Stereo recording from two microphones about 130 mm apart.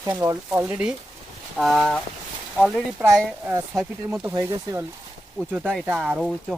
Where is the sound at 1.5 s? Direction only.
Centre (ahead or behind).